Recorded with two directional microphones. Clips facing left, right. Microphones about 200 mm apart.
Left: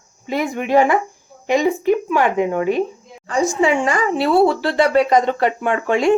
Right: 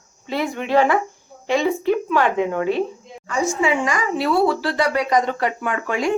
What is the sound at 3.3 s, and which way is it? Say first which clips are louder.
Speech: left 3 dB; 35° left (ahead or behind).